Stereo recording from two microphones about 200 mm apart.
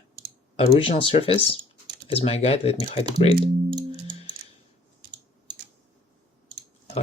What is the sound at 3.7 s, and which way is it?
Music, 20° right (ahead or behind).